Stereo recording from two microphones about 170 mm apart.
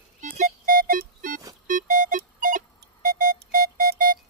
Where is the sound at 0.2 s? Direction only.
50° right (ahead or behind).